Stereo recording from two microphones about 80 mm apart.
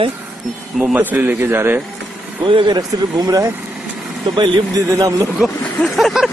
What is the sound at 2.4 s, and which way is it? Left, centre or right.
Speech, right.